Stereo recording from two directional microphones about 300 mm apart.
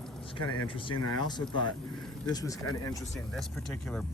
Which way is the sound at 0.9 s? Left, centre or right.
Left.